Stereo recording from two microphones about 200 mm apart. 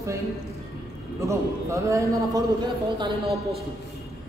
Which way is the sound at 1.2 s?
15° right (ahead or behind).